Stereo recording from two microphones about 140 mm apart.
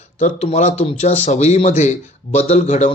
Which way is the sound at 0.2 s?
55° left (ahead or behind).